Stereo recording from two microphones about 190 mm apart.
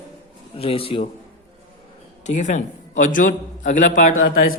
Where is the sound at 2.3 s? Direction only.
40° left (ahead or behind).